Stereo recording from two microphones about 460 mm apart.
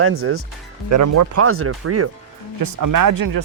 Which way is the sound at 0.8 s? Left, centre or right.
Right.